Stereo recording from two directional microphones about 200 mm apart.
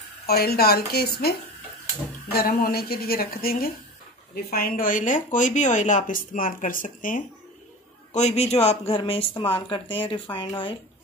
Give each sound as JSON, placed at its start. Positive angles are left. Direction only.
{"t": 0.3, "sound": "a woman's voice", "side_deg": 50}
{"t": 2.3, "sound": "a woman's voice", "side_deg": 50}